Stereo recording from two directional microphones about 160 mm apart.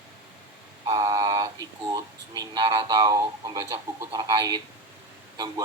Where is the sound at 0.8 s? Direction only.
20° right (ahead or behind).